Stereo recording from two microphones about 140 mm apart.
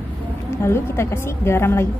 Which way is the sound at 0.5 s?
20° left (ahead or behind).